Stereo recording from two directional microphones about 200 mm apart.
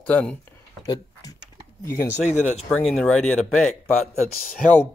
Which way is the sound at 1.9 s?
45° left (ahead or behind).